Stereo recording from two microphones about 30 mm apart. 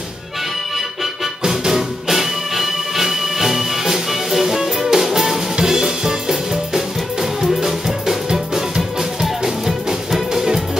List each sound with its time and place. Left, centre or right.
1.7 s music: centre